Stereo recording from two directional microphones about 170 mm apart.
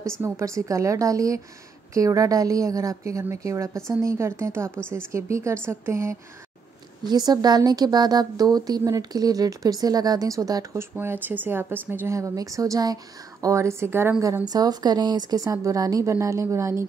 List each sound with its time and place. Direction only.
0.2 s speech: 20° right (ahead or behind)